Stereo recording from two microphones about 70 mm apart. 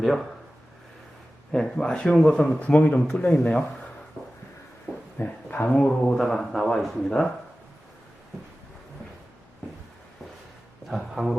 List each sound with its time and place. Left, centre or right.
0.0 s a man's voice: centre
1.5 s speech: centre
5.1 s speech: left
6.1 s a man's voice: centre
7.1 s speech: centre
10.8 s speech: centre